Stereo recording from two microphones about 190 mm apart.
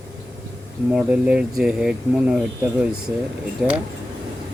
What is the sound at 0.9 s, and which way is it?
Speech, 5° right (ahead or behind).